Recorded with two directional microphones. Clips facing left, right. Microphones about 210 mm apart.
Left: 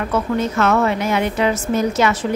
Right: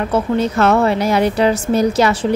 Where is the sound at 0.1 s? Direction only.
30° right (ahead or behind).